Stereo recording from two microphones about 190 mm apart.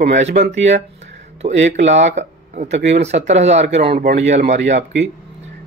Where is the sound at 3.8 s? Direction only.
55° right (ahead or behind).